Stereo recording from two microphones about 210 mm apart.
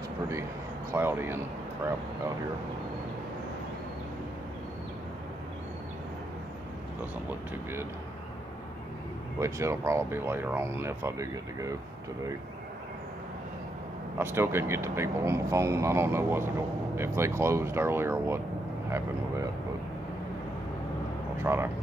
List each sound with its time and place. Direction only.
0.9 s speech: 10° right (ahead or behind)
9.4 s speech: 15° right (ahead or behind)
14.1 s speech: 10° right (ahead or behind)
21.5 s speech: 10° right (ahead or behind)